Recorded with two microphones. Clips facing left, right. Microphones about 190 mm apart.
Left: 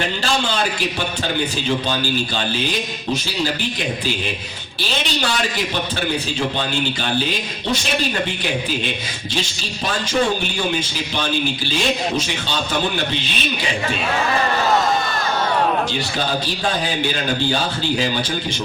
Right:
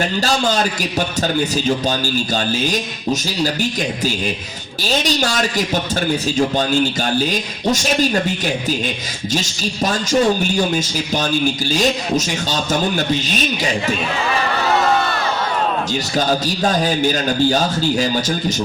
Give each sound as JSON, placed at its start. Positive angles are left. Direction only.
{"t": 0.0, "sound": "speech", "side_deg": -40}
{"t": 9.3, "sound": "speech", "side_deg": -45}
{"t": 16.6, "sound": "speech", "side_deg": -40}